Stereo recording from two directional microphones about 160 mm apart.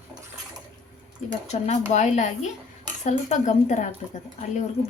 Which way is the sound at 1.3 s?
40° left (ahead or behind).